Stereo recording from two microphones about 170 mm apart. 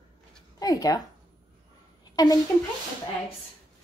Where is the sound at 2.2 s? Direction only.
25° left (ahead or behind).